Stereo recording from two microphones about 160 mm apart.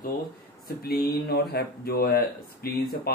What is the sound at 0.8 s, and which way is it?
Speech, 75° left (ahead or behind).